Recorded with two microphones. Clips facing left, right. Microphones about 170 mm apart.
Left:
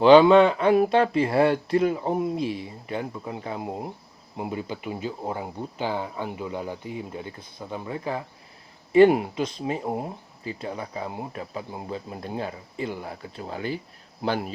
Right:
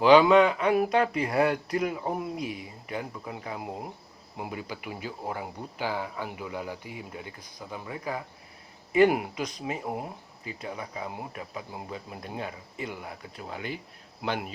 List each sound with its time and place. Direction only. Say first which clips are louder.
0.0 s speech: left 4 dB; 30° left (ahead or behind)